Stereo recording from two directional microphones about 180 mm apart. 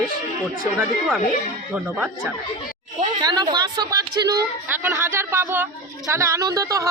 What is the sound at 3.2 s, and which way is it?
A woman's voice, 20° right (ahead or behind).